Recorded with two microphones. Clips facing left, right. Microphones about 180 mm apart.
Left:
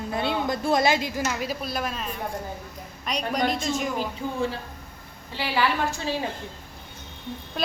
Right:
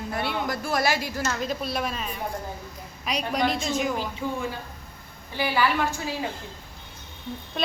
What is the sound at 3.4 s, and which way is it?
Speech, 45° left (ahead or behind).